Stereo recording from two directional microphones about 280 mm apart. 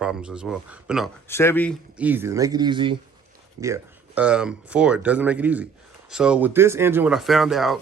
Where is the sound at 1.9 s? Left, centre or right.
Centre.